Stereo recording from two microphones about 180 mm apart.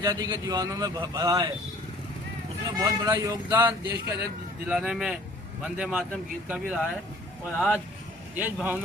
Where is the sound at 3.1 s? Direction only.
20° right (ahead or behind).